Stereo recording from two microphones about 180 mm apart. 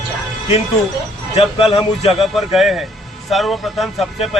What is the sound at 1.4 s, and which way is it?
Speech, 30° left (ahead or behind).